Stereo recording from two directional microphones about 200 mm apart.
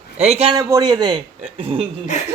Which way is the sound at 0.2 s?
30° right (ahead or behind).